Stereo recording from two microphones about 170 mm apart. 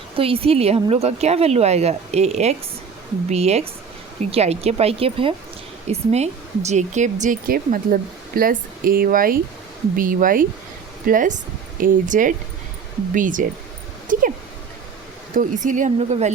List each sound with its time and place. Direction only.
0.2 s speech: 35° right (ahead or behind); by 13.5 s 50° right (ahead or behind)
14.1 s a sound: 50° right (ahead or behind)
15.4 s speech: 50° right (ahead or behind)